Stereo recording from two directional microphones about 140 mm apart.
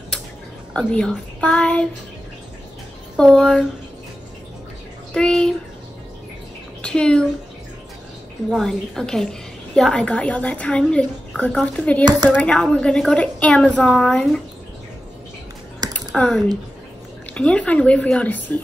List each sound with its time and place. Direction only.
0.7 s a woman's voice: 5° left (ahead or behind)
3.2 s a woman's voice: 5° left (ahead or behind)
5.1 s a woman's voice: 5° left (ahead or behind)
6.8 s a child's voice: 5° left (ahead or behind)
8.5 s a woman's voice: centre (ahead or behind)
12.0 s speech: 30° right (ahead or behind)
12.3 s a woman's voice: 10° left (ahead or behind)
16.1 s a woman's voice: 5° left (ahead or behind)